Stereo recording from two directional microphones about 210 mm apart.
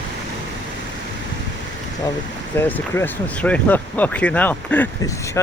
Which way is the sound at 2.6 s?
10° left (ahead or behind).